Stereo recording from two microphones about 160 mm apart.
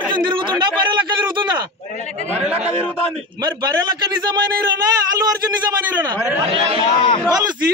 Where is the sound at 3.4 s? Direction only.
25° right (ahead or behind).